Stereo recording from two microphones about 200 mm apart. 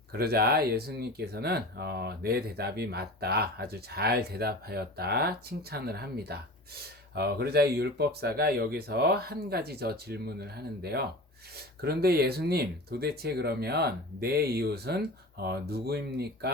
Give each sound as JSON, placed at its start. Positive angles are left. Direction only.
{"t": 0.1, "sound": "speech", "side_deg": -50}